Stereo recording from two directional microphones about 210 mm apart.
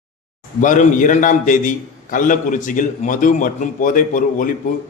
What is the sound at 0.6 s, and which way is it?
A man's voice, 35° left (ahead or behind).